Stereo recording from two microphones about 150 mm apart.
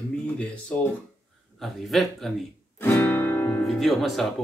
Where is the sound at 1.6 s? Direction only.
Centre (ahead or behind).